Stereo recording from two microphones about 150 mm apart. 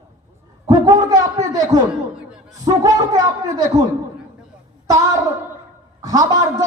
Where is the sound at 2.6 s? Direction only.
25° right (ahead or behind).